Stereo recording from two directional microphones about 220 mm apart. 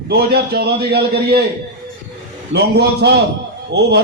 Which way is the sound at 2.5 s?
50° right (ahead or behind).